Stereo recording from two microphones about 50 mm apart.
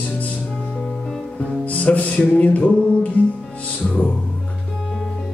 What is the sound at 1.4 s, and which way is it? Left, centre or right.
Music, left.